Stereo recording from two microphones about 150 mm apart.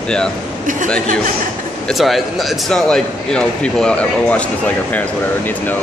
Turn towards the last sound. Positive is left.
turn(degrees=10)  # may be behind; listen again after turning